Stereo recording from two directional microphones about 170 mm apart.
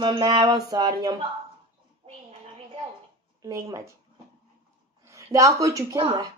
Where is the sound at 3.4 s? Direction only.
15° right (ahead or behind).